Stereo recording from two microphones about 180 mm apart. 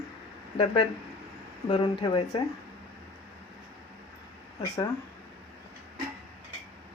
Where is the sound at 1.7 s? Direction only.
25° left (ahead or behind).